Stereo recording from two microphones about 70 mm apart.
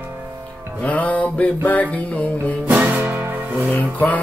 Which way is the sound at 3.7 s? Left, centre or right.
Left.